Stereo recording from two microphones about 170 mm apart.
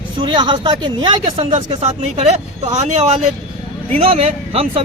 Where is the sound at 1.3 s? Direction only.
40° right (ahead or behind).